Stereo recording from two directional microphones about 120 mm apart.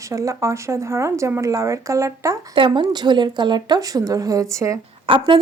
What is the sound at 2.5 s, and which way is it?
A woman's voice, 45° right (ahead or behind).